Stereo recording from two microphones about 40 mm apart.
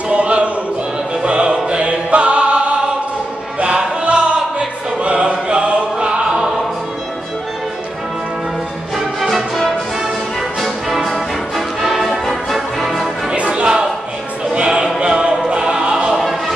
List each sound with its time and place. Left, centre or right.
0.1 s music: right
3.6 s choir: right
8.9 s music: centre
11.1 s music: centre
13.4 s a sound: right
14.5 s choir: right
16.2 s a sound: centre